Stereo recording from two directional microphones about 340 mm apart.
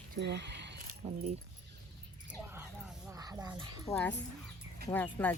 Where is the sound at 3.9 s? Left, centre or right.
Centre.